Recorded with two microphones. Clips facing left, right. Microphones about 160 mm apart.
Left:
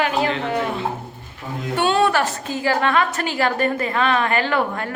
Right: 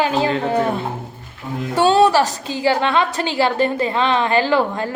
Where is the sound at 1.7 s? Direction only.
35° right (ahead or behind).